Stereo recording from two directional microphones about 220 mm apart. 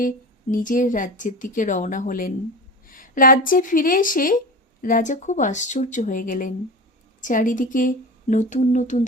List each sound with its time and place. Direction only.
0.5 s speech: 35° left (ahead or behind)